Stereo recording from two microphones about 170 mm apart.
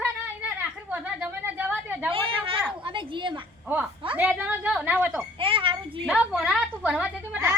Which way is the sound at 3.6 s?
10° right (ahead or behind).